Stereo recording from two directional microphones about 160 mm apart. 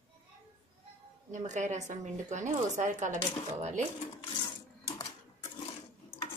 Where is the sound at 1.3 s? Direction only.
50° right (ahead or behind).